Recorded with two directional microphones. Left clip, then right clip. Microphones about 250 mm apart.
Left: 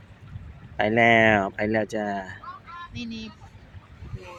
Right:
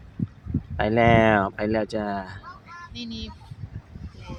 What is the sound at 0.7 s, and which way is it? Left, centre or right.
Speech, centre.